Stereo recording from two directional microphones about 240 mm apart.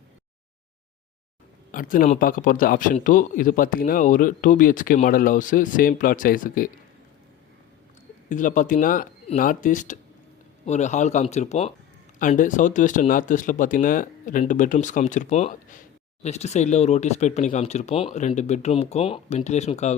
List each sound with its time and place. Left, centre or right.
1.7 s a man's voice: left
8.3 s a man's voice: left